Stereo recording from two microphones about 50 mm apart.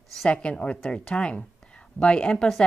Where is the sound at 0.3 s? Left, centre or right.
Left.